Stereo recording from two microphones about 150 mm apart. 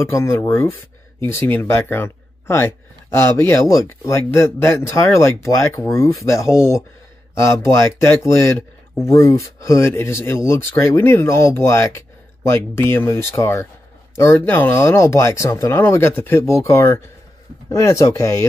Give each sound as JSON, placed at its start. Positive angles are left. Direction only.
{"t": 0.0, "sound": "speech", "side_deg": 20}